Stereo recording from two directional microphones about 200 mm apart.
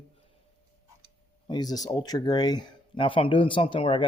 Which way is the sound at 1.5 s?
20° left (ahead or behind).